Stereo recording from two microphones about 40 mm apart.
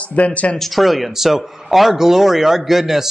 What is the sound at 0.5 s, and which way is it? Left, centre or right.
A man's voice, centre.